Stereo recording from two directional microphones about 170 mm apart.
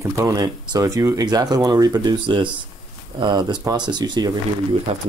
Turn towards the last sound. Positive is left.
turn(degrees=-40)  # may be behind; listen again after turning